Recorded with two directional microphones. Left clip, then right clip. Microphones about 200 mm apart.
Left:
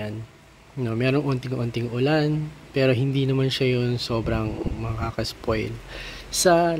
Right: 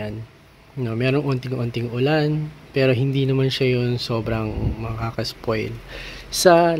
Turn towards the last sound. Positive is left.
turn(degrees=-10)  # may be behind; listen again after turning